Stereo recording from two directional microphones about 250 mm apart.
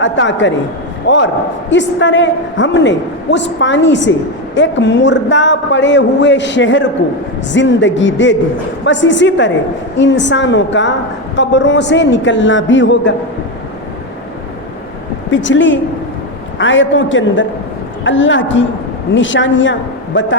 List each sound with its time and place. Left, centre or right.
0.0 s a woman's voice: left
15.3 s a woman's voice: left